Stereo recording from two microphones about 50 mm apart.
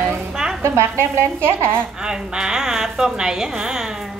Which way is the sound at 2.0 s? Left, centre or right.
Centre.